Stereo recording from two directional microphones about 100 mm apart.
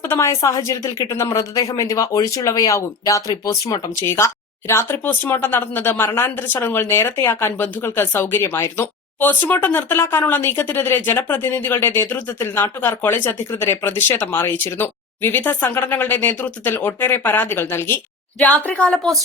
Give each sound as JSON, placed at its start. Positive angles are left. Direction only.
{"t": 0.1, "sound": "a woman's voice", "side_deg": 35}